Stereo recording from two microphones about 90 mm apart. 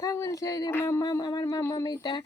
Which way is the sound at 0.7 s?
30° left (ahead or behind).